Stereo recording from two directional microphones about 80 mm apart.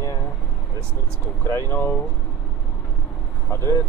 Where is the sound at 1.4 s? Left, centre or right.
Left.